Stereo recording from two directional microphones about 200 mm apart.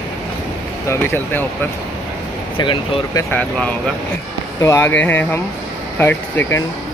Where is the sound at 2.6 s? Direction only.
20° left (ahead or behind).